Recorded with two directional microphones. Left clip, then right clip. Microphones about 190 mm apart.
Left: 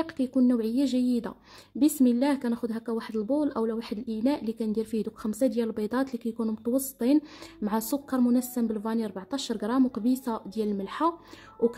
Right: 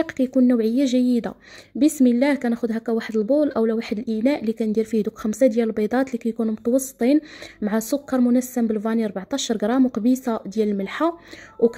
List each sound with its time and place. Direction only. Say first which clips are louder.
0.0 s a woman's voice: right 7 dB; 20° right (ahead or behind)
7.9 s a woman's voice: right 7 dB; 10° right (ahead or behind)